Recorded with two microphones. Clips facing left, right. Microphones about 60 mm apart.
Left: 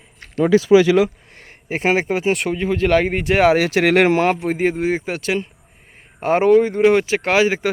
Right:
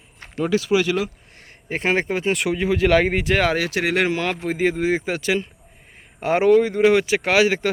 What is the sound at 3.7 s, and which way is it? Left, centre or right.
Speech, left.